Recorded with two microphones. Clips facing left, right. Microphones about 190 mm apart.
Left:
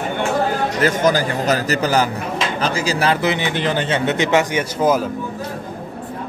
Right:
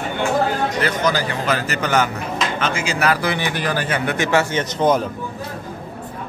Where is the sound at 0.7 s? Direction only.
45° left (ahead or behind); by 5.1 s 5° left (ahead or behind).